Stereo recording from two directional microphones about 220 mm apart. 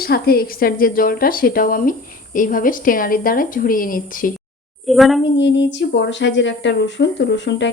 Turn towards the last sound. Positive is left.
turn(degrees=55)  # may be behind; listen again after turning